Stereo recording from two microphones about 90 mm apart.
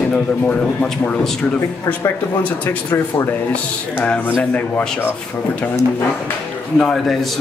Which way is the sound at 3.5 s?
15° left (ahead or behind).